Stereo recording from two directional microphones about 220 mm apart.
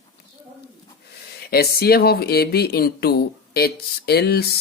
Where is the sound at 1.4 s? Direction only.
45° left (ahead or behind).